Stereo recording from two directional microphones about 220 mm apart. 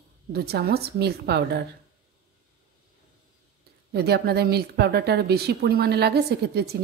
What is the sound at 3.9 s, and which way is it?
A woman's voice, 45° right (ahead or behind).